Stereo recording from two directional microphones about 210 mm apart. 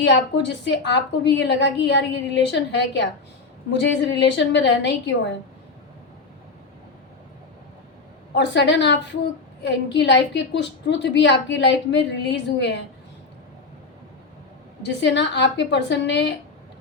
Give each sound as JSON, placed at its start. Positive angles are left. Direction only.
{"t": 0.0, "sound": "a woman's voice", "side_deg": 55}
{"t": 8.4, "sound": "a woman's voice", "side_deg": 55}
{"t": 14.8, "sound": "a woman's voice", "side_deg": 55}